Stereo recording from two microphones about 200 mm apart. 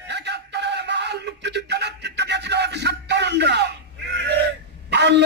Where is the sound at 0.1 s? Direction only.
60° right (ahead or behind).